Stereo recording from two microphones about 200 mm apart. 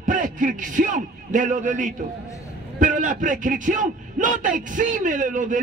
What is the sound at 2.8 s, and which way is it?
A man's voice, 40° right (ahead or behind).